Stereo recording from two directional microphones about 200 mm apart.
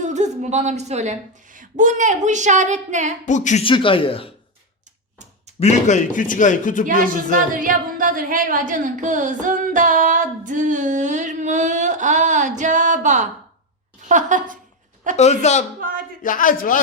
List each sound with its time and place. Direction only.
0.0 s a woman's voice: 35° right (ahead or behind)
3.2 s speech: 35° left (ahead or behind)
5.5 s speech: 35° left (ahead or behind)
7.1 s a woman's voice: 40° right (ahead or behind)
15.1 s speech: 35° left (ahead or behind)
15.8 s a sound: 45° right (ahead or behind)
16.2 s a man's voice: 40° left (ahead or behind)